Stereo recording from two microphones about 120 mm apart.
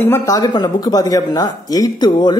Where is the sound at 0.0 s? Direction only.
20° left (ahead or behind).